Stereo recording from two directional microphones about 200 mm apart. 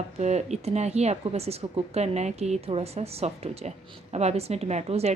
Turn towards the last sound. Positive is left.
turn(degrees=-30)  # may be behind; listen again after turning